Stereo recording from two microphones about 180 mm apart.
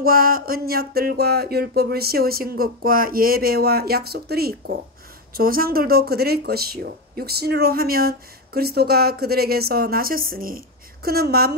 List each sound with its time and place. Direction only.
0.0 s speech: 55° right (ahead or behind)